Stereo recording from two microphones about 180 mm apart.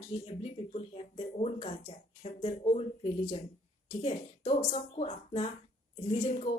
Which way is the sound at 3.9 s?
30° left (ahead or behind).